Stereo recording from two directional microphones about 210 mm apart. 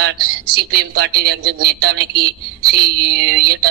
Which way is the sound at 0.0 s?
50° right (ahead or behind).